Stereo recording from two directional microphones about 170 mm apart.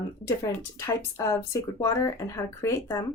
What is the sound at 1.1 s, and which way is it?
Speech, 15° left (ahead or behind).